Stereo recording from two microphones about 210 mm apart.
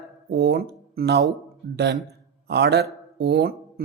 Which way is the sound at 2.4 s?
50° right (ahead or behind).